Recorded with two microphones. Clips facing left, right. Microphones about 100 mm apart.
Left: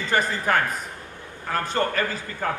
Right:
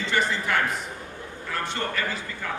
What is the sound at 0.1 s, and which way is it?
A man's voice, 45° left (ahead or behind).